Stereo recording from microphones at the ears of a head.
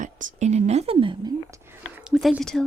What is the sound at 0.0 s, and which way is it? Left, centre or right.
A woman's voice, right.